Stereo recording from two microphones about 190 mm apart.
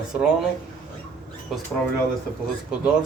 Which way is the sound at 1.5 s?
Centre (ahead or behind).